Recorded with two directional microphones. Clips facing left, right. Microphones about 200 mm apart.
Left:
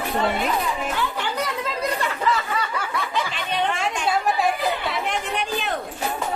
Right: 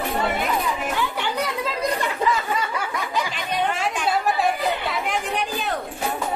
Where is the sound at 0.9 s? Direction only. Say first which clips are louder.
Right 1 dB; 15° right (ahead or behind).